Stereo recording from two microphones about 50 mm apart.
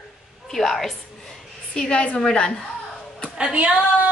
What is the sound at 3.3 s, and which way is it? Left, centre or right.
Speech, centre.